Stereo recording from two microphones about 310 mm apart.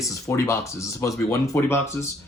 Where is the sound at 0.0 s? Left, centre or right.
Centre.